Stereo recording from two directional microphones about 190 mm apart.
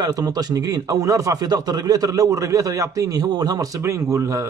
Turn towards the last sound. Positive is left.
turn(degrees=-15)  # may be behind; listen again after turning